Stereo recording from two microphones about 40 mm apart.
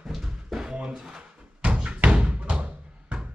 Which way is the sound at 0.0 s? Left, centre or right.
Centre.